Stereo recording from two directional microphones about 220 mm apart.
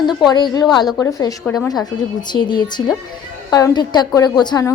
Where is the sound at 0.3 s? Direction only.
20° left (ahead or behind).